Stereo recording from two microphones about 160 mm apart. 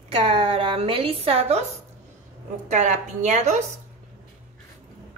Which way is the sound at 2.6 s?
50° right (ahead or behind).